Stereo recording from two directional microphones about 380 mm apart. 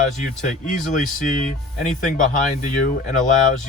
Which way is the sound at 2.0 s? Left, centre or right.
Left.